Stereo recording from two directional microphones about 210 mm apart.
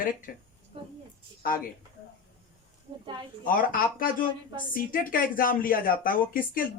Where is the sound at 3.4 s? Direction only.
40° left (ahead or behind).